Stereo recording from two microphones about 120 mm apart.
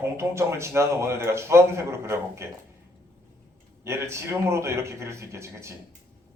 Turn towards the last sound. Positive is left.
turn(degrees=-25)  # may be behind; listen again after turning